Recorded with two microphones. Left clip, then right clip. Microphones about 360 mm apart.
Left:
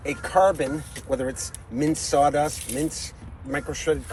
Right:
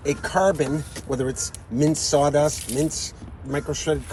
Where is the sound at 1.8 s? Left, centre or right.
Centre.